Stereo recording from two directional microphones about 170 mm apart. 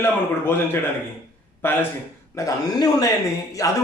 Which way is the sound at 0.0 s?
15° left (ahead or behind).